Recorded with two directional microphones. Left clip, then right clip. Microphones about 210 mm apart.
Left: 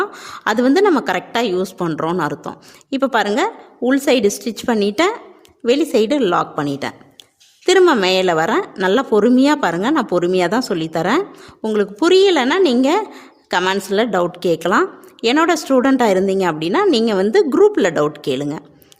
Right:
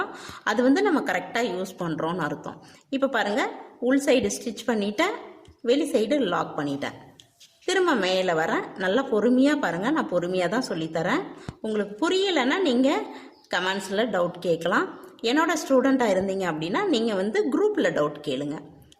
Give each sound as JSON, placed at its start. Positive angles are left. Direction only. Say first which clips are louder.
{"t": 0.0, "sound": "a woman's voice", "louder": "left 8 dB", "side_deg": 45}